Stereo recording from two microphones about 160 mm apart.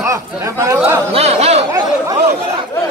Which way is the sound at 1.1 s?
40° right (ahead or behind).